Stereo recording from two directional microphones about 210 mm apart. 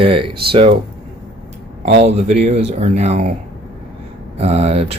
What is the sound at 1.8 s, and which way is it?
Speech, 30° right (ahead or behind).